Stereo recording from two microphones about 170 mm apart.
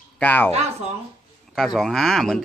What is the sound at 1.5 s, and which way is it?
Speech, centre (ahead or behind).